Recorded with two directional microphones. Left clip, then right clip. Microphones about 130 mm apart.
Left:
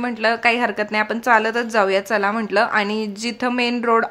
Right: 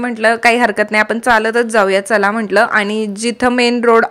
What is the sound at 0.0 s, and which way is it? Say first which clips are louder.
A woman's voice: right 6 dB; 30° right (ahead or behind).